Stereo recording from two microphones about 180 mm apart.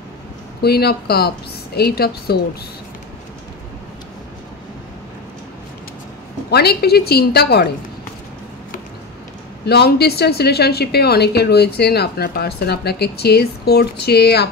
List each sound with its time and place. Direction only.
0.6 s a woman's voice: 60° left (ahead or behind)
6.5 s a woman's voice: 60° left (ahead or behind)
9.7 s a woman's voice: 65° left (ahead or behind)